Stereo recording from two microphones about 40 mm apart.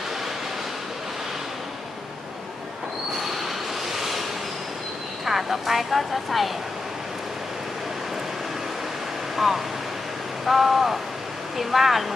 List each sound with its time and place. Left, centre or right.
3.2 s train: centre
3.9 s waves: centre
5.2 s speech: centre
9.3 s a sound: centre
10.4 s speech: centre